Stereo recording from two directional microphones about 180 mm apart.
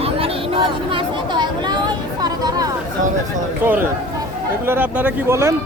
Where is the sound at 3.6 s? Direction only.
10° right (ahead or behind).